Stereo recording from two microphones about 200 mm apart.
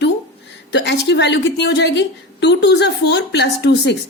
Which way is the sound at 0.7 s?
60° left (ahead or behind).